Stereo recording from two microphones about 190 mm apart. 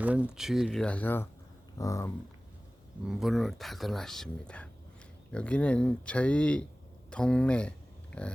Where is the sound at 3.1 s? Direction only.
Centre (ahead or behind).